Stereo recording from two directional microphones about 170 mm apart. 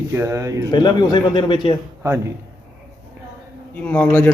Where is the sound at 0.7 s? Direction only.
25° left (ahead or behind).